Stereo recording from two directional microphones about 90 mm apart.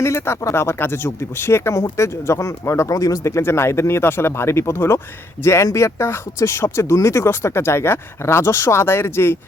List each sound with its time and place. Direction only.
0.0 s speech: 30° left (ahead or behind)